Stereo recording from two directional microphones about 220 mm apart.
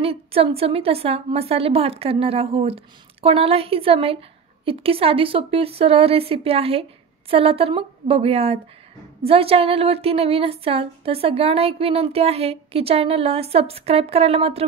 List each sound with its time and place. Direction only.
0.0 s a woman's voice: 25° right (ahead or behind)